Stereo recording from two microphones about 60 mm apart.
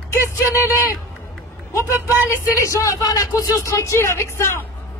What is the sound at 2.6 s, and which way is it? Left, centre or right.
Speech, left.